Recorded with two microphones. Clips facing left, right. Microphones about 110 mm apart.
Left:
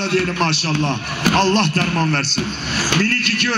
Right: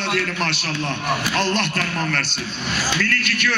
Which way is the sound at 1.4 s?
30° left (ahead or behind).